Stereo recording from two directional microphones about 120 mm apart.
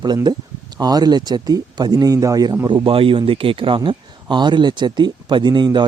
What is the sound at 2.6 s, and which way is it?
Speech, 45° right (ahead or behind).